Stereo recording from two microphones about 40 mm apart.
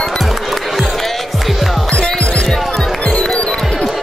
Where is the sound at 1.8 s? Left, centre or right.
Centre.